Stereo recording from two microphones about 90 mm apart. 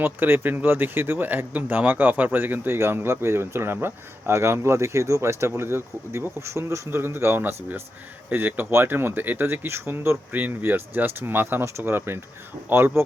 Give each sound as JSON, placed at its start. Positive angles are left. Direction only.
{"t": 0.0, "sound": "speech", "side_deg": -20}